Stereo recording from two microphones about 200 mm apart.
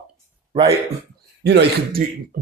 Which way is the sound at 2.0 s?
40° right (ahead or behind).